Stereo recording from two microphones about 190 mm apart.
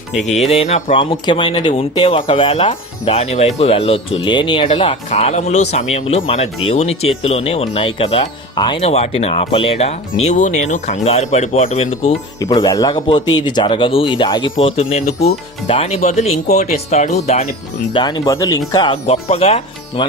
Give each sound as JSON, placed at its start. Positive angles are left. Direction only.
{"t": 0.5, "sound": "speech", "side_deg": 35}
{"t": 5.0, "sound": "speech", "side_deg": 35}
{"t": 12.4, "sound": "speech", "side_deg": 20}
{"t": 17.9, "sound": "speech", "side_deg": 20}